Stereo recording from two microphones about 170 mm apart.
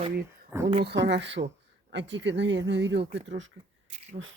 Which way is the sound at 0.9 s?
85° right.